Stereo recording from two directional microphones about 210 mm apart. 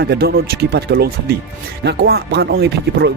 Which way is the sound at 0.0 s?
50° right (ahead or behind).